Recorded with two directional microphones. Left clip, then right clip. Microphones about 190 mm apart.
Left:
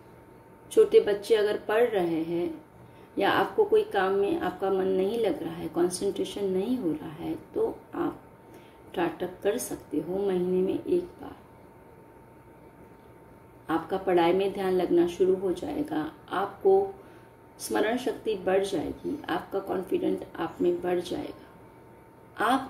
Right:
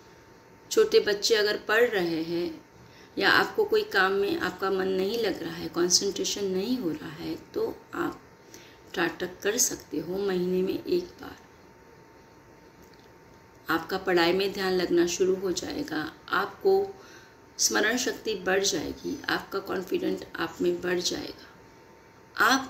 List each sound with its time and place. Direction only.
0.7 s speech: 5° left (ahead or behind)
8.9 s speech: 5° left (ahead or behind)
13.7 s speech: 5° left (ahead or behind)
22.3 s speech: 5° left (ahead or behind)